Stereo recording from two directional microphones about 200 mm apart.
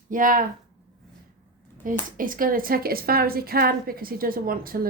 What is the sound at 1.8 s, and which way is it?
A woman's voice, 45° right (ahead or behind).